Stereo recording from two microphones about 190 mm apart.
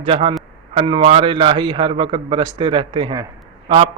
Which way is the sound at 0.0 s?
30° right (ahead or behind).